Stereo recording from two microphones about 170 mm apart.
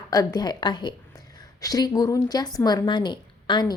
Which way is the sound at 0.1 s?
20° left (ahead or behind).